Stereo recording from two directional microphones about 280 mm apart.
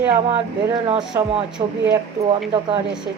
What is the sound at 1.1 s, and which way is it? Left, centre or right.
Speech, centre.